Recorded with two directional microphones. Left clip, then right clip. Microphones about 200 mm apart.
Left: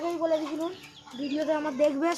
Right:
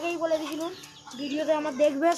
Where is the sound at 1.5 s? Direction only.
30° left (ahead or behind).